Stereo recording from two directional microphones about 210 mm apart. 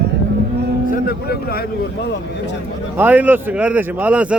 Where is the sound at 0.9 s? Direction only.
50° left (ahead or behind).